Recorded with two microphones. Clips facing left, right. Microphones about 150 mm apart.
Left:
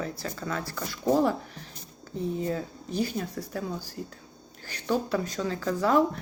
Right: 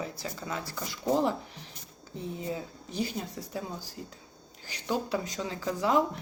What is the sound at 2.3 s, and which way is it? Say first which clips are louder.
Speech: left 5 dB; 15° right (ahead or behind).